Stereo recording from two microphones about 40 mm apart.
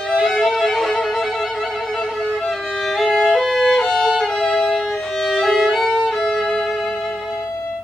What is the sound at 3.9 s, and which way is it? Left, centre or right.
Violin, centre.